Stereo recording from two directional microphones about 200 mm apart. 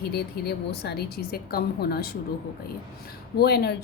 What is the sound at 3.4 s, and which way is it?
Speech, 50° left (ahead or behind).